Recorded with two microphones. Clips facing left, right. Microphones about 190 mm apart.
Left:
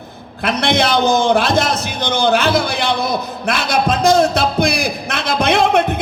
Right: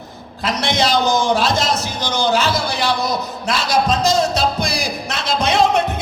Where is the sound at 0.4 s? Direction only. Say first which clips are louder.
Left 3 dB; 55° left (ahead or behind).